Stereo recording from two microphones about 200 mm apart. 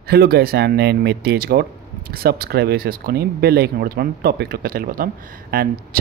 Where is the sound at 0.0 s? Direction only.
50° right (ahead or behind).